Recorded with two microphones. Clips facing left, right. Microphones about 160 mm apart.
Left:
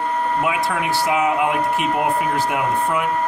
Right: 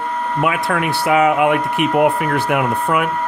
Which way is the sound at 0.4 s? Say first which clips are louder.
Right 3 dB; 65° right (ahead or behind).